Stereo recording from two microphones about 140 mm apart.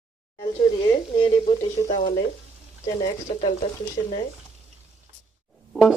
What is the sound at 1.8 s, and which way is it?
Frying, 40° left (ahead or behind).